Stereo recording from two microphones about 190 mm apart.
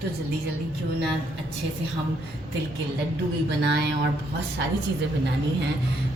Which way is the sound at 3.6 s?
60° right (ahead or behind).